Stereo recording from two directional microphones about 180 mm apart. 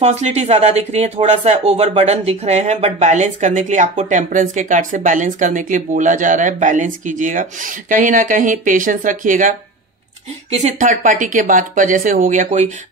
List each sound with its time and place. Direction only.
0.0 s speech: 35° right (ahead or behind)
10.5 s speech: 40° right (ahead or behind)